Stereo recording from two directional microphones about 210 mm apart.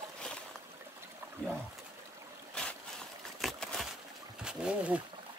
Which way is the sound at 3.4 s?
Centre (ahead or behind).